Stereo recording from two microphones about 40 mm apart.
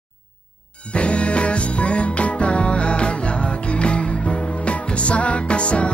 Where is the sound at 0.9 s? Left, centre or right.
Left.